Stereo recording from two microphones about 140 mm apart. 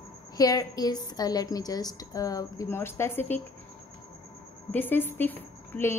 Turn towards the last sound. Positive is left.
turn(degrees=15)  # may be behind; listen again after turning